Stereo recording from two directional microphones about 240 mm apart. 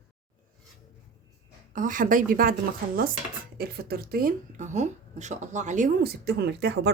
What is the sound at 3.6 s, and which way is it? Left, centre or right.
Speech, right.